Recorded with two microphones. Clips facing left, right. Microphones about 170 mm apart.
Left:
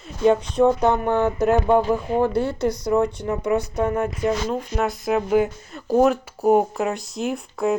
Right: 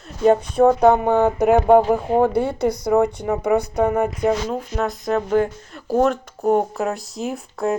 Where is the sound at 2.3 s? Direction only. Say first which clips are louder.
Right 2 dB; 15° right (ahead or behind).